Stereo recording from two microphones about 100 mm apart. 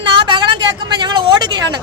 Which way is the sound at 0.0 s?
50° right (ahead or behind).